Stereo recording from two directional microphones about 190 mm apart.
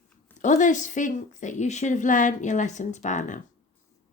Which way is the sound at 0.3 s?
40° left (ahead or behind).